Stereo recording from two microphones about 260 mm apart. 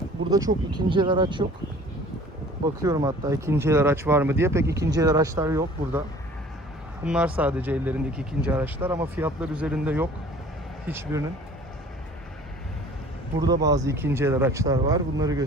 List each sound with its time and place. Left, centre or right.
0.3 s speech: centre
2.8 s speech: centre
7.0 s speech: centre
13.4 s speech: centre